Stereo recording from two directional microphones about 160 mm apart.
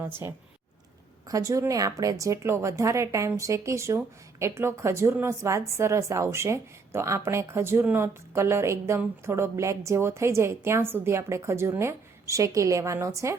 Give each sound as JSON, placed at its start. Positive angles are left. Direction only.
{"t": 0.0, "sound": "a woman's voice", "side_deg": -15}